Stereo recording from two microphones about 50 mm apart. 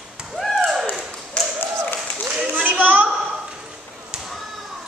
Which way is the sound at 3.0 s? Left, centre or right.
Centre.